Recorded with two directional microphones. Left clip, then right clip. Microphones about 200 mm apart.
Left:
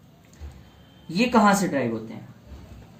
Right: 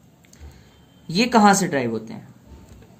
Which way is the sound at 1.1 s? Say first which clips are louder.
Right 4 dB; 40° right (ahead or behind).